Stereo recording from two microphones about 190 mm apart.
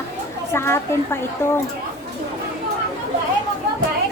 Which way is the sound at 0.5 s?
15° left (ahead or behind).